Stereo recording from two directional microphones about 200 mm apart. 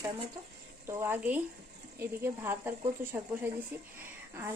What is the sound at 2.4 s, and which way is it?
Speech, 10° right (ahead or behind).